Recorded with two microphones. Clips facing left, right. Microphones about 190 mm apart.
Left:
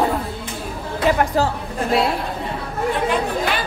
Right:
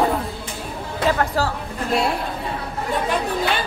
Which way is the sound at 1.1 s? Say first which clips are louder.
Left 3 dB; 20° left (ahead or behind).